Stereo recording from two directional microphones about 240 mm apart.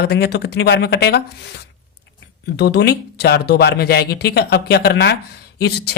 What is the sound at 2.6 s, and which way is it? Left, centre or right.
Speech, left.